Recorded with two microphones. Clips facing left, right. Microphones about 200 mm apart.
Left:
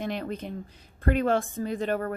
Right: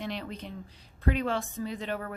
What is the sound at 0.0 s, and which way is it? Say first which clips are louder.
A woman's voice: left 5 dB; 50° left (ahead or behind).